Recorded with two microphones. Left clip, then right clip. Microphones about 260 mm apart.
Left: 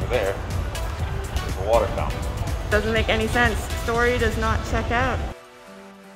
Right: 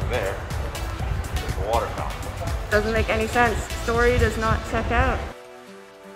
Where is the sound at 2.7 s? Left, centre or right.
Centre.